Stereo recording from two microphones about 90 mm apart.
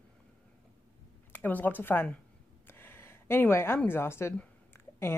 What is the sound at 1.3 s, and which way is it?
Speech, 20° left (ahead or behind).